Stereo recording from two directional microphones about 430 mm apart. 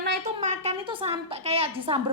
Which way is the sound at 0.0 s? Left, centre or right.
Centre.